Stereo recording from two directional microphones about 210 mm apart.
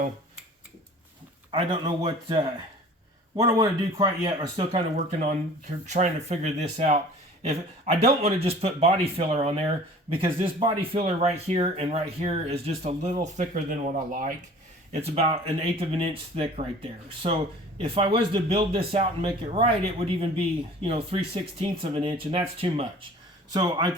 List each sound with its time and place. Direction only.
1.5 s speech: 20° right (ahead or behind)